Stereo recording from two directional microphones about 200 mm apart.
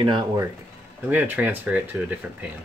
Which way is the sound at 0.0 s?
20° right (ahead or behind).